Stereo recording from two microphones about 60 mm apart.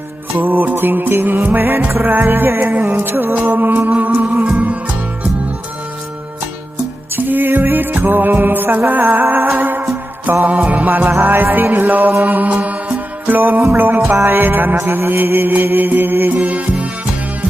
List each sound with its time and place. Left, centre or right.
0.3 s music: right
7.2 s music: right
11.7 s music: right